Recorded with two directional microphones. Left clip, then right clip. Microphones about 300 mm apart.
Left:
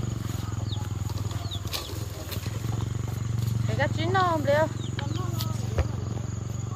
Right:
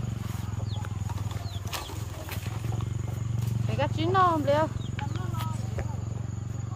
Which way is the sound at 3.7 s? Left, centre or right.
Right.